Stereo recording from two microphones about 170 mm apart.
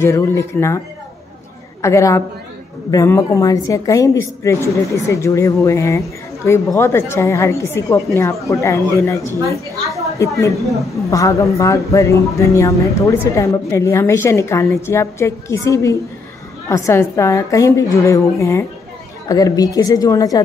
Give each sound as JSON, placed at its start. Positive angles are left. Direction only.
{"t": 0.0, "sound": "a woman's voice", "side_deg": 15}
{"t": 1.8, "sound": "a woman's voice", "side_deg": 15}